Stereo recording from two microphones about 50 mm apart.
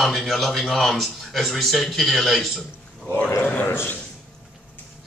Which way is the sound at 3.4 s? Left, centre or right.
Left.